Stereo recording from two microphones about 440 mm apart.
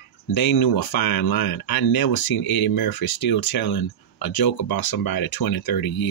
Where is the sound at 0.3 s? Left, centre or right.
Left.